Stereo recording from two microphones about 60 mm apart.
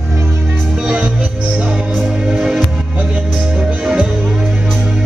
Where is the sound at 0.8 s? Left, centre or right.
Right.